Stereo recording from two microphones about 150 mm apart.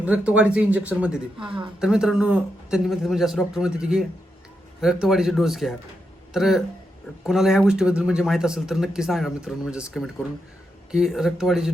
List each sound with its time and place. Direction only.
0.0 s speech: 10° right (ahead or behind)